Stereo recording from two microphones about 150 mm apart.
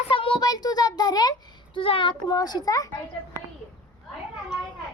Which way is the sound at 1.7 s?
35° left (ahead or behind).